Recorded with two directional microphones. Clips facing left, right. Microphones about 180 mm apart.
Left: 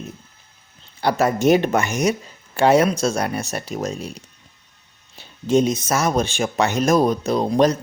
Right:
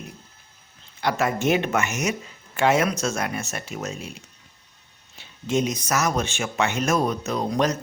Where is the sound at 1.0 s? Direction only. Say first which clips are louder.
Left 5 dB; 35° left (ahead or behind).